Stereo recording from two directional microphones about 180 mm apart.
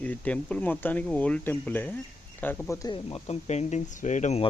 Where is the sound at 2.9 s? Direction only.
30° left (ahead or behind).